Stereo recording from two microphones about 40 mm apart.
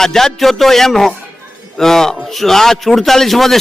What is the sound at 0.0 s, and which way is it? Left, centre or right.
A man's voice, centre.